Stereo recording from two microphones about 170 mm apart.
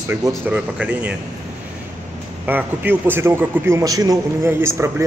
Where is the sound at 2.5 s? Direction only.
10° right (ahead or behind).